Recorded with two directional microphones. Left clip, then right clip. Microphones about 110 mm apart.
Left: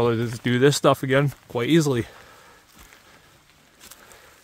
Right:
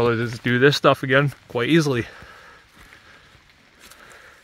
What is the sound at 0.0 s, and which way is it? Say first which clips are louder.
Speech: right 2 dB; 20° left (ahead or behind).